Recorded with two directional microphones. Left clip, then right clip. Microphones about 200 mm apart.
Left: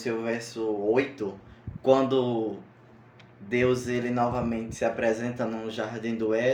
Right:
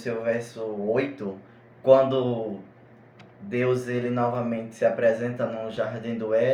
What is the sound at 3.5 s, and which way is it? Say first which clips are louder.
Speech: even; 30° left (ahead or behind).